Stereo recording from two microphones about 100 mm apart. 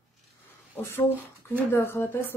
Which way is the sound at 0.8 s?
25° left (ahead or behind).